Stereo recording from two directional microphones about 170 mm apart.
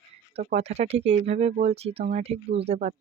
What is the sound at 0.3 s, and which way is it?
Speech, 40° right (ahead or behind).